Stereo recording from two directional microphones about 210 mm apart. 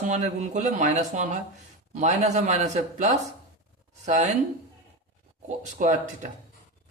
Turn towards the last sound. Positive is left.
turn(degrees=-35)  # may be behind; listen again after turning